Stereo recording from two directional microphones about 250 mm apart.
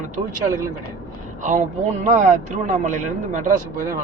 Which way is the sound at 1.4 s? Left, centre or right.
Right.